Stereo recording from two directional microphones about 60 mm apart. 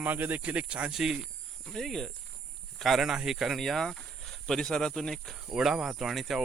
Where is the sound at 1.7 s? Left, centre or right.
Centre.